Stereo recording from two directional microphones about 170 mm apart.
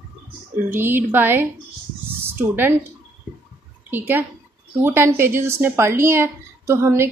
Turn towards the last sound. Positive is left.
turn(degrees=-15)  # may be behind; listen again after turning